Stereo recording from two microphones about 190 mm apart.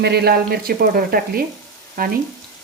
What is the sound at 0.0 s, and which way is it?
Speech, 60° right (ahead or behind).